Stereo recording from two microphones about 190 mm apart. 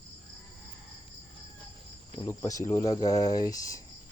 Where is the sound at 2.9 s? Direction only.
20° left (ahead or behind).